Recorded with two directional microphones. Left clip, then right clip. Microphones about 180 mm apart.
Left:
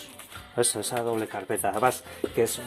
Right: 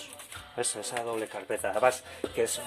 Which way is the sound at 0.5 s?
35° left (ahead or behind).